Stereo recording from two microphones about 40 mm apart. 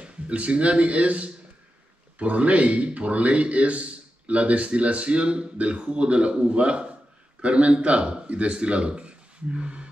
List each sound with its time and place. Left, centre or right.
0.0 s a man's voice: right